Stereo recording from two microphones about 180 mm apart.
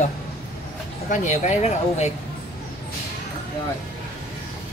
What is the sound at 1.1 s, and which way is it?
Speech, 40° left (ahead or behind).